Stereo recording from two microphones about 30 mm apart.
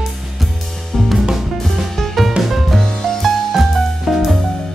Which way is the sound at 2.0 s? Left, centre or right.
Centre.